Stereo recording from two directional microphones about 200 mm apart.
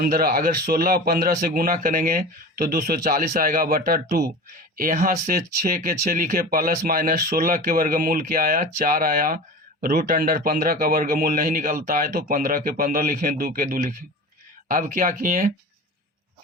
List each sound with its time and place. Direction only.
0.0 s speech: 50° right (ahead or behind)